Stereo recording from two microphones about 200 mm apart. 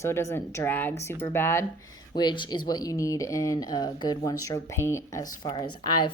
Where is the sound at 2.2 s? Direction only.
20° left (ahead or behind).